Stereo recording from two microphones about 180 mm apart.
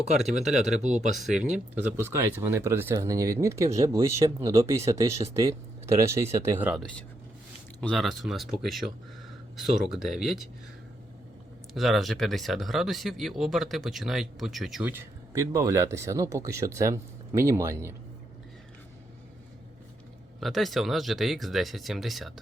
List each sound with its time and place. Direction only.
0.4 s speech: centre (ahead or behind)
0.8 s speech: 40° right (ahead or behind)
1.2 s speech: 5° right (ahead or behind)
7.8 s speech: centre (ahead or behind)
11.7 s speech: centre (ahead or behind)
20.4 s speech: centre (ahead or behind)